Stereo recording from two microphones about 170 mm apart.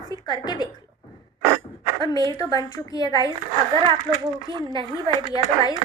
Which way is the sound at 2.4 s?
25° left (ahead or behind).